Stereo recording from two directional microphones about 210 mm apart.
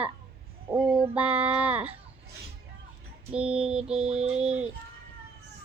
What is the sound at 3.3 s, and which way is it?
Child singing, 5° right (ahead or behind).